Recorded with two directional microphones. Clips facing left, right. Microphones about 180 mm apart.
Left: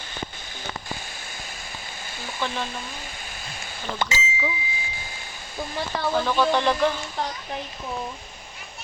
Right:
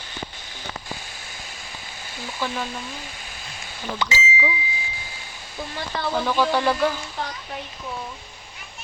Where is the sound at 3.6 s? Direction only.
50° left (ahead or behind).